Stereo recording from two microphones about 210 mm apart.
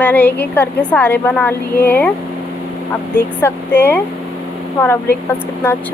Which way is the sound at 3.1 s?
10° left (ahead or behind).